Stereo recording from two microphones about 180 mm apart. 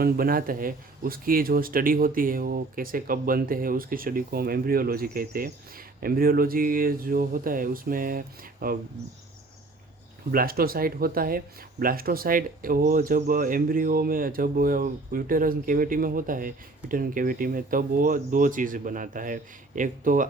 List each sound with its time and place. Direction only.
0.0 s speech: 55° right (ahead or behind)
10.3 s speech: 55° right (ahead or behind)